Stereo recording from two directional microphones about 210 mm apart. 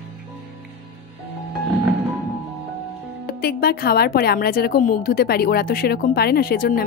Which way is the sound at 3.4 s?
45° left (ahead or behind).